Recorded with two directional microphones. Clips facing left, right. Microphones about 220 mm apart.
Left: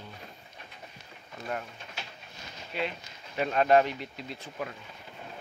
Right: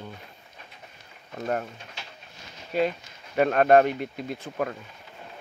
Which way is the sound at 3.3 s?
55° right (ahead or behind).